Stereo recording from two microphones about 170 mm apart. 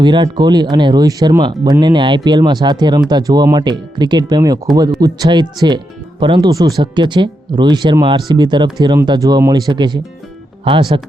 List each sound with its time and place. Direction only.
0.0 s speech: 25° right (ahead or behind)